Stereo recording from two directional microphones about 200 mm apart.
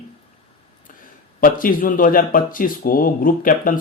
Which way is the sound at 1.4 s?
45° left (ahead or behind).